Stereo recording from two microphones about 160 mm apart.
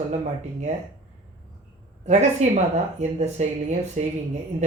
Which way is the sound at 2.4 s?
45° right (ahead or behind).